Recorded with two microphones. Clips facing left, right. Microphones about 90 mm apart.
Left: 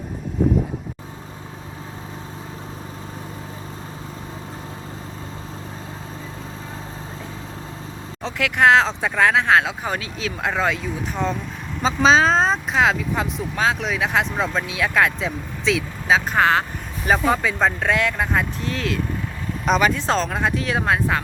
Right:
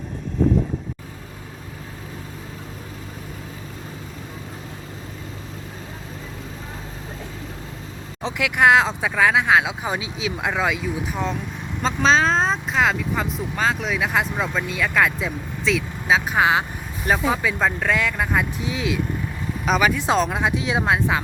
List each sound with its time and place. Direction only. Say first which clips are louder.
8.2 s speech: even; 15° right (ahead or behind)